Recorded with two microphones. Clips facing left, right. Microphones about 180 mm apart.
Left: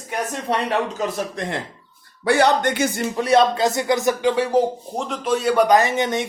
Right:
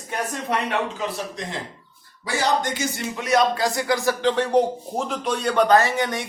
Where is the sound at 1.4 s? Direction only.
60° left (ahead or behind).